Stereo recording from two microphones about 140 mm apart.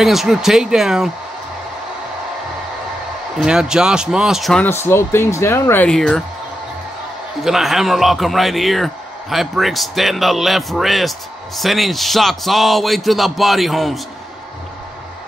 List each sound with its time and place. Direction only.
0.0 s a man's voice: centre (ahead or behind)
3.3 s a man's voice: 5° right (ahead or behind)
4.6 s speech: 15° left (ahead or behind)
5.9 s a man's voice: 5° left (ahead or behind)
7.4 s a man's voice: centre (ahead or behind)